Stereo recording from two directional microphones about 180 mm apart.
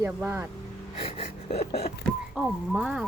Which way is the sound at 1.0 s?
35° left (ahead or behind).